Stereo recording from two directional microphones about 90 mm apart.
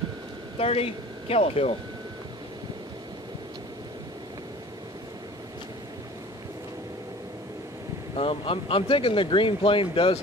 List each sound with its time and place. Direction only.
0.6 s speech: 90° left
8.2 s speech: 90° left